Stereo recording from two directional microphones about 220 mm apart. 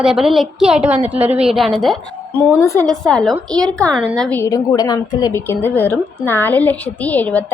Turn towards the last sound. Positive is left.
turn(degrees=5)  # may be behind; listen again after turning